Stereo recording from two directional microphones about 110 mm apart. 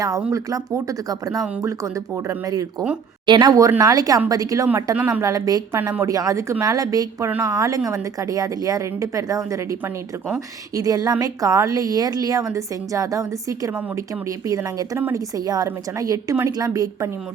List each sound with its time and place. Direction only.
0.3 s a woman's voice: 30° right (ahead or behind)
4.9 s a woman's voice: 15° right (ahead or behind)
5.2 s a woman's voice: 35° right (ahead or behind)
10.8 s a woman's voice: 35° right (ahead or behind)